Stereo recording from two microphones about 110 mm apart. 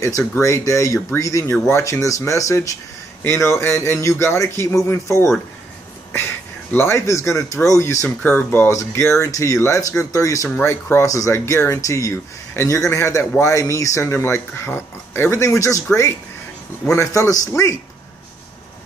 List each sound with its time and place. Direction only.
0.3 s speech: 25° left (ahead or behind)
8.2 s speech: 15° left (ahead or behind)